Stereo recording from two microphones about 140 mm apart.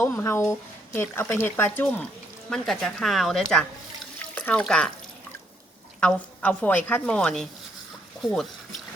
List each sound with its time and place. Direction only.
0.0 s a woman's voice: 20° left (ahead or behind)
2.5 s speech: centre (ahead or behind)
4.4 s a sound: 10° left (ahead or behind)
4.6 s speech: 5° left (ahead or behind)
6.0 s a woman's voice: 10° left (ahead or behind)